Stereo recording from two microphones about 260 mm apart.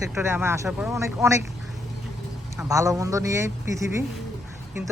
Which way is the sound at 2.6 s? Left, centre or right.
Centre.